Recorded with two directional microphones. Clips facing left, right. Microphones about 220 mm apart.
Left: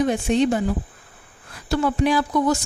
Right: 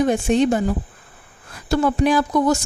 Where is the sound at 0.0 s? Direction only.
45° right (ahead or behind).